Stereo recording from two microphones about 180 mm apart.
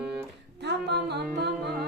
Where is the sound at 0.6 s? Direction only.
70° right (ahead or behind).